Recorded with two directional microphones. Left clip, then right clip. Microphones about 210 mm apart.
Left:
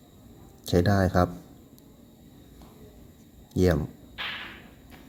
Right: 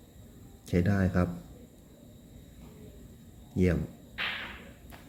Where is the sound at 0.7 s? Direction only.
20° left (ahead or behind).